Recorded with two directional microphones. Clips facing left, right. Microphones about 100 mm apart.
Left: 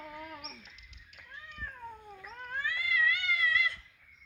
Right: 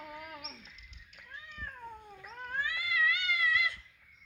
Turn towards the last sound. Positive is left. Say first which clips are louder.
# even
turn(degrees=-20)  # may be behind; listen again after turning